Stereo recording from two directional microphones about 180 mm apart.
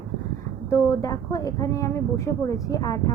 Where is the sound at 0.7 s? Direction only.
15° left (ahead or behind).